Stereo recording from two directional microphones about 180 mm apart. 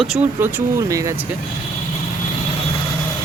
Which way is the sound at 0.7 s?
15° right (ahead or behind).